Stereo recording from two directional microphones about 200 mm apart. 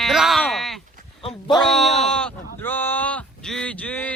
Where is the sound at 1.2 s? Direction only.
20° left (ahead or behind).